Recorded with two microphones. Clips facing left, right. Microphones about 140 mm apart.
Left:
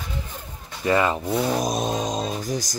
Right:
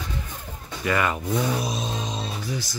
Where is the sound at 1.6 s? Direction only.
50° left (ahead or behind).